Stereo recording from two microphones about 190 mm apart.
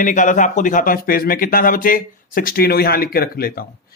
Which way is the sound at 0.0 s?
40° left (ahead or behind).